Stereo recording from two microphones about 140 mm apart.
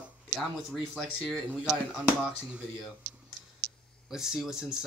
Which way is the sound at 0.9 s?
5° left (ahead or behind).